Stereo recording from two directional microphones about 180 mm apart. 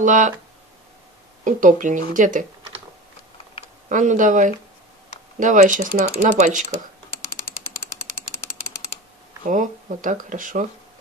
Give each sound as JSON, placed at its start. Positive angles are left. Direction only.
{"t": 0.0, "sound": "speech", "side_deg": -45}
{"t": 1.4, "sound": "speech", "side_deg": -45}
{"t": 3.9, "sound": "speech", "side_deg": -45}
{"t": 9.5, "sound": "speech", "side_deg": -45}